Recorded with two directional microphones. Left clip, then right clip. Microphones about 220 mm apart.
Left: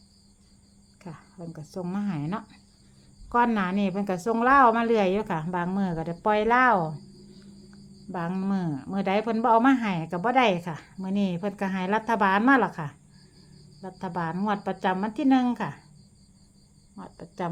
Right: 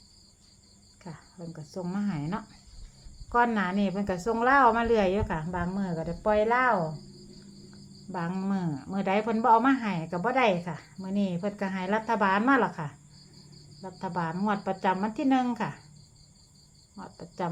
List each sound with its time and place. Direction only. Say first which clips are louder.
1.0 s speech: left 2 dB; 20° left (ahead or behind); by 6.7 s 35° left (ahead or behind)
8.1 s speech: left 2 dB; 25° left (ahead or behind)
16.9 s speech: left 1 dB; 15° left (ahead or behind)